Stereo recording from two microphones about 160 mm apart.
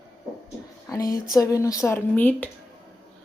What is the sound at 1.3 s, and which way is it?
A woman's voice, 20° left (ahead or behind).